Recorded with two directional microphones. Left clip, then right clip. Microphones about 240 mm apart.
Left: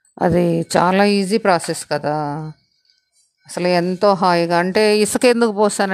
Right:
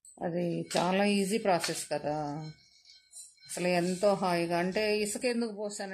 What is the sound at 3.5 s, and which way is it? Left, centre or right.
A man's voice, left.